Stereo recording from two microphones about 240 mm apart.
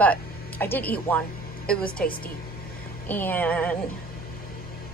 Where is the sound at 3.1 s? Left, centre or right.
Centre.